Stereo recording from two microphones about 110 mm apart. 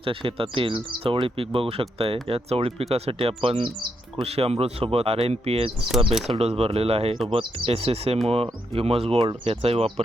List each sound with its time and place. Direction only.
0.0 s speech: 55° right (ahead or behind)
4.2 s speech: 70° right (ahead or behind)